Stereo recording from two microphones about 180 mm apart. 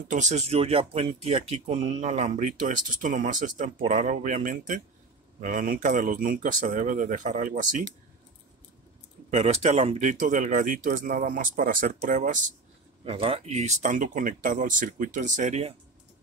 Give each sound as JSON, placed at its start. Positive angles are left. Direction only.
{"t": 0.1, "sound": "speech", "side_deg": -40}
{"t": 9.3, "sound": "speech", "side_deg": -35}
{"t": 13.0, "sound": "speech", "side_deg": -30}